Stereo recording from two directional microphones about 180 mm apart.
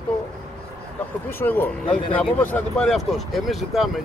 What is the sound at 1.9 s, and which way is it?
Speech, 30° left (ahead or behind).